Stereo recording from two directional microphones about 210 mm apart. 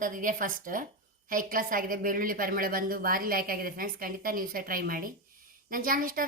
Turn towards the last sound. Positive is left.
turn(degrees=-40)  # may be behind; listen again after turning